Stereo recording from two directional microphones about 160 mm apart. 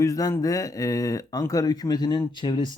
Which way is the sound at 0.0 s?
20° left (ahead or behind).